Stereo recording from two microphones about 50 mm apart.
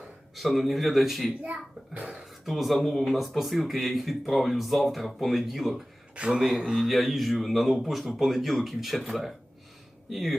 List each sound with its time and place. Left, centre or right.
0.3 s speech: centre
1.4 s a child's voice: right
2.2 s speech: centre
6.1 s a child's voice: right
6.7 s speech: centre